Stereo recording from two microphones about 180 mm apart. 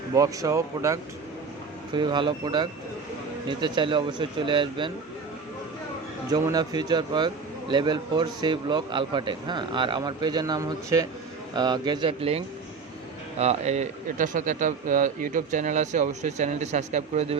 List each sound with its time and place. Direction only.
0.1 s a man's voice: 20° right (ahead or behind)
6.3 s a man's voice: 20° right (ahead or behind)
13.4 s a man's voice: 35° right (ahead or behind)